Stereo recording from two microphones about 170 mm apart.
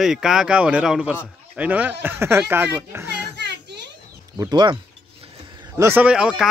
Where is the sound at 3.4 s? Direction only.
80° right.